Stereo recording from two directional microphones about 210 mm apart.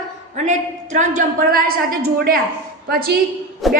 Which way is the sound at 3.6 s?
Centre (ahead or behind).